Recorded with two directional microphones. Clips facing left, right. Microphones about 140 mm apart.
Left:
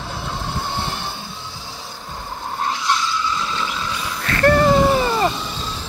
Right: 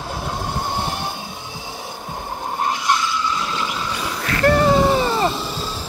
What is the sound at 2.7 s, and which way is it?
Vehicle, 50° right (ahead or behind).